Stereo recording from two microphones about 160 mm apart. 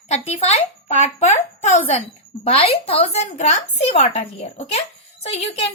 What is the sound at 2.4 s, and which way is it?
A woman's voice, 40° left (ahead or behind).